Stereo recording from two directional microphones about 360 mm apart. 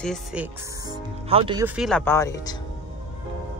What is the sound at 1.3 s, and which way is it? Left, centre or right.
Speech, centre.